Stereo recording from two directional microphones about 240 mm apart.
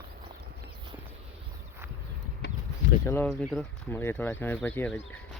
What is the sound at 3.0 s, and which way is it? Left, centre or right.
Speech, centre.